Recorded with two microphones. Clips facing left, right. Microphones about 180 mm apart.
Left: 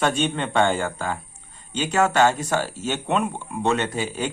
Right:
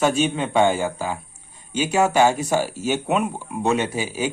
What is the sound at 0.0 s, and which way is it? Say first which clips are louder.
A man's voice: right 3 dB; 5° right (ahead or behind).